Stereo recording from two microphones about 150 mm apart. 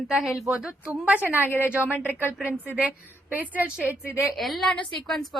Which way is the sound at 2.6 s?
10° right (ahead or behind).